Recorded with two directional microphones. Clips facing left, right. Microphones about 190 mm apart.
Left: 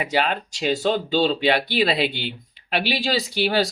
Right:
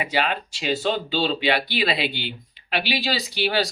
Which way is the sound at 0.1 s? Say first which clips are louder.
Left 2 dB; 40° left (ahead or behind).